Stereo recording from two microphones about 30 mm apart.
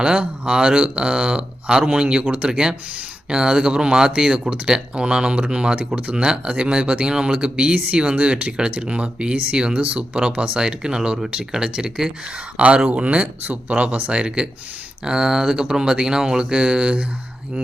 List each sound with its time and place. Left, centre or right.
0.2 s speech: right
8.7 s speech: right
12.5 s speech: right
13.4 s speech: right
14.1 s speech: right
15.0 s speech: right